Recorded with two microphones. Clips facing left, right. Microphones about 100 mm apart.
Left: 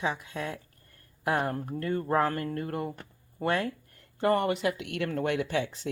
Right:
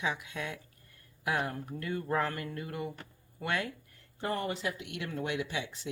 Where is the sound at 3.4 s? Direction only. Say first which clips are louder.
Left 6 dB; 35° left (ahead or behind).